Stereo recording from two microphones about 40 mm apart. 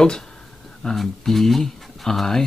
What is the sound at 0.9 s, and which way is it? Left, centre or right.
Speech, centre.